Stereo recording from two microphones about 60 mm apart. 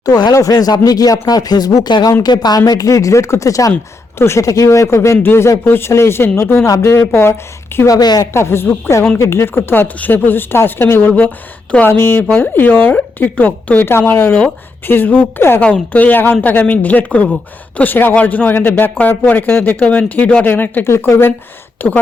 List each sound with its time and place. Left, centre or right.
0.0 s speech: left
4.2 s speech: left
4.4 s speech: left
5.2 s speech: left
7.9 s speech: left
8.3 s speech: left
15.6 s speech: left
20.8 s speech: left